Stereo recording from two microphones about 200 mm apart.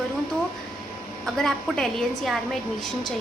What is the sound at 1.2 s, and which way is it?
A woman's voice, centre (ahead or behind).